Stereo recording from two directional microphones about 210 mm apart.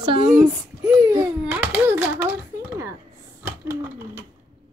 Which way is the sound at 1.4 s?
10° right (ahead or behind).